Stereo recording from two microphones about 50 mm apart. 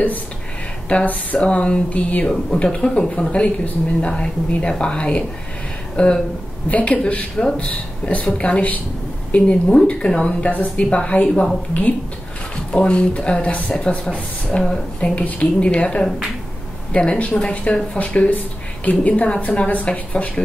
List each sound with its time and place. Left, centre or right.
0.8 s speech: left
12.7 s speech: centre
13.7 s speech: centre
15.0 s speech: left